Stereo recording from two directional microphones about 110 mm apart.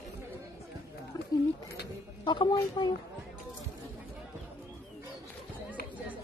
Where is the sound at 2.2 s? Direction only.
45° left (ahead or behind).